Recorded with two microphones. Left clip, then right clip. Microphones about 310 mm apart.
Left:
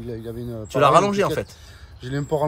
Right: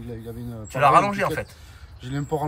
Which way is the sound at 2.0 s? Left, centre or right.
Left.